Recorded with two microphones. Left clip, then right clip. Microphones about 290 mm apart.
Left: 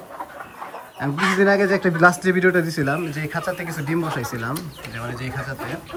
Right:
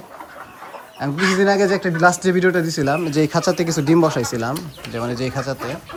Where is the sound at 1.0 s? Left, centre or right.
Centre.